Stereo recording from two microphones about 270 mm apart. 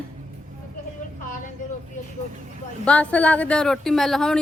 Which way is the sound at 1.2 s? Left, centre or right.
Left.